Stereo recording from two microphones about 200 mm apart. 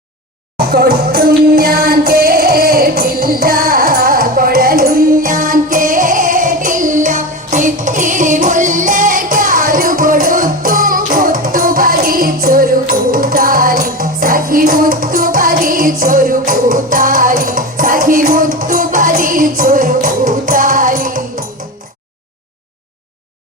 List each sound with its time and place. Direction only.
0.7 s music: 50° right (ahead or behind)